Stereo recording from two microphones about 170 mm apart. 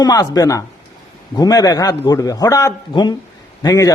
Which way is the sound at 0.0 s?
20° left (ahead or behind).